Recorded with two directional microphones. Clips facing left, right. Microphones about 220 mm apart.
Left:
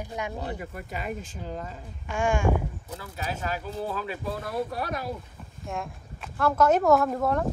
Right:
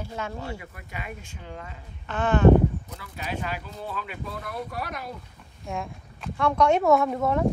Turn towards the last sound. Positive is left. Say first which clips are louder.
# right 2 dB
turn(degrees=0)  # may be behind; listen again after turning